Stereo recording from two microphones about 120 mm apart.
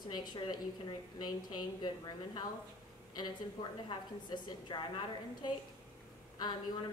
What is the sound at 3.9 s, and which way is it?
Speech, 40° left (ahead or behind).